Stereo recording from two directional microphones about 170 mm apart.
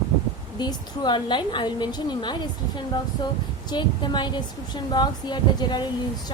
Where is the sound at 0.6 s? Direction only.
25° left (ahead or behind).